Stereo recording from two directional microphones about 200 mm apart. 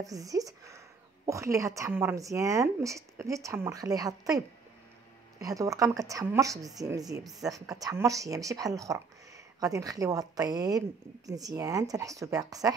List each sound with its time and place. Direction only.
0.0 s a woman's voice: 15° right (ahead or behind)
5.4 s a woman's voice: 15° right (ahead or behind)